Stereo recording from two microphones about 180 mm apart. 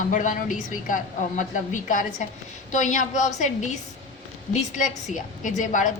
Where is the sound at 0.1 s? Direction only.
45° left (ahead or behind).